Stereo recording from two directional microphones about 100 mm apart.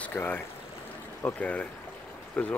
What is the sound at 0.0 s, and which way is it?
Speech, 20° left (ahead or behind).